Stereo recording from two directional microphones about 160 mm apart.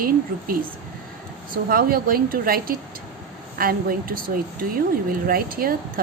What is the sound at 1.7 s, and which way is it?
A woman's voice, 65° right (ahead or behind).